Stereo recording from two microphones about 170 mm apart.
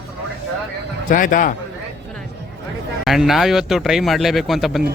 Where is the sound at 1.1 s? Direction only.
50° left (ahead or behind).